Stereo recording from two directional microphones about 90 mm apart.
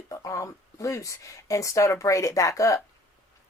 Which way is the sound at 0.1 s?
35° left (ahead or behind).